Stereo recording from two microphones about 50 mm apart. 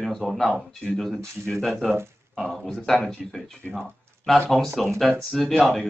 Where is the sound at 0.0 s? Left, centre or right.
Centre.